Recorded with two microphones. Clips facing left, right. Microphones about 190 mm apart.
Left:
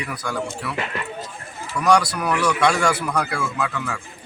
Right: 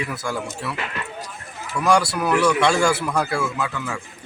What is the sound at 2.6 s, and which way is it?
Speech, 25° right (ahead or behind).